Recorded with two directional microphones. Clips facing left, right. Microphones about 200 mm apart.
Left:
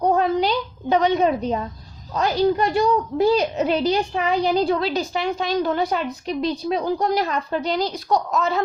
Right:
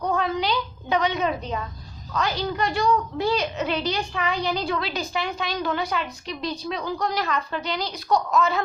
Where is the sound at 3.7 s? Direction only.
50° left (ahead or behind).